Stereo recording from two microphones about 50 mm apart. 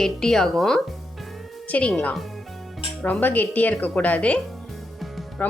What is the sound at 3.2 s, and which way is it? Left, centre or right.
Speech, left.